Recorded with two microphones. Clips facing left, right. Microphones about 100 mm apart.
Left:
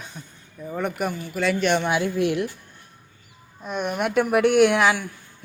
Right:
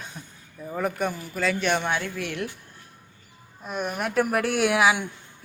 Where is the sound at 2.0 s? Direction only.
20° left (ahead or behind).